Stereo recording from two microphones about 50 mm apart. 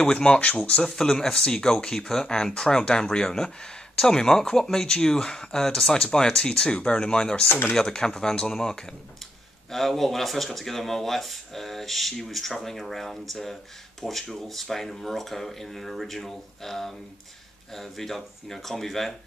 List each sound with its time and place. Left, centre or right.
0.0 s speech: centre
0.9 s speech: centre
7.4 s speech: left
7.7 s speech: centre